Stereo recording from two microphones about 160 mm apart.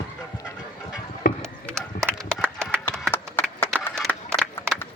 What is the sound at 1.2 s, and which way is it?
Mechanisms, 60° left (ahead or behind).